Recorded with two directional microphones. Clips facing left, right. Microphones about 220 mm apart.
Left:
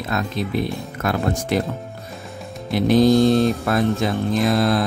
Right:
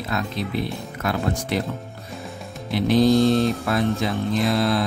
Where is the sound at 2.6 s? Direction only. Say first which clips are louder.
Left 3 dB; 45° left (ahead or behind).